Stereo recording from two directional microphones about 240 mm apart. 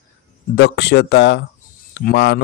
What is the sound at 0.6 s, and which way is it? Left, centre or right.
Speech, left.